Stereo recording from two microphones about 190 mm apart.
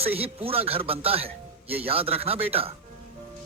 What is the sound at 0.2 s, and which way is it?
A woman's voice, 30° right (ahead or behind).